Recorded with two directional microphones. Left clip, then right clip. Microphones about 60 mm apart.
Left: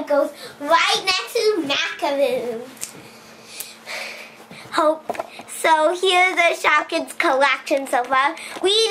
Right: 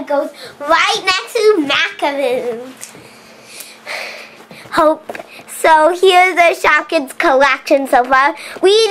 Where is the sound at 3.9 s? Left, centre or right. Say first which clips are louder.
Right 6 dB; right.